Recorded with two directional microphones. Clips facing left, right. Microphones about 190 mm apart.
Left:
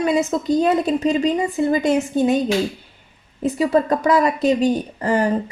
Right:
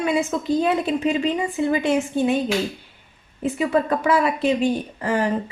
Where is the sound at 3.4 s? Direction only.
40° left (ahead or behind).